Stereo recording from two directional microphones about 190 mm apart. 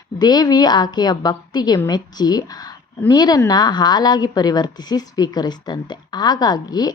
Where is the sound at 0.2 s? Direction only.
20° left (ahead or behind).